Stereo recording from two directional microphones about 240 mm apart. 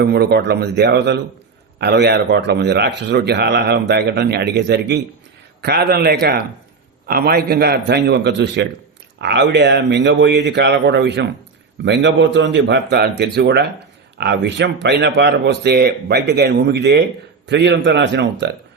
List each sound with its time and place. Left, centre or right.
0.0 s a man's voice: right